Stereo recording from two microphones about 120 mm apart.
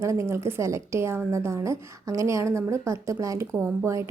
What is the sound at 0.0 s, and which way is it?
A woman's voice, 25° right (ahead or behind).